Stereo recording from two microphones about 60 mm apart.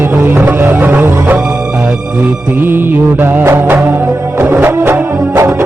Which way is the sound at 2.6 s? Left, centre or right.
Right.